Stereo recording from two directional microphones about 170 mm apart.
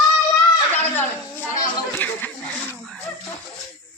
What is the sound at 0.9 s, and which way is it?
Speech, 10° left (ahead or behind).